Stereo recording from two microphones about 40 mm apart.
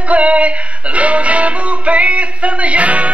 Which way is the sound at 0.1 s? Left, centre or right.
Right.